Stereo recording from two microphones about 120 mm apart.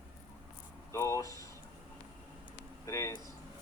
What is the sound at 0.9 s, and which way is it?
Speech, 25° left (ahead or behind).